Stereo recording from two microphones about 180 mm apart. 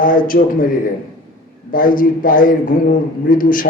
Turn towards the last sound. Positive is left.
turn(degrees=50)  # may be behind; listen again after turning